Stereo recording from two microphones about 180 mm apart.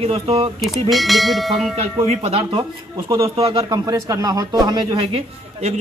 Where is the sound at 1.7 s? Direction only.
35° right (ahead or behind).